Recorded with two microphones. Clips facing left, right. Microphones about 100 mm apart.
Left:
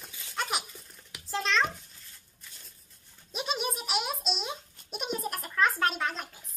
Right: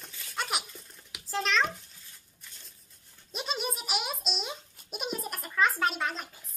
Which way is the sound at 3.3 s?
Centre (ahead or behind).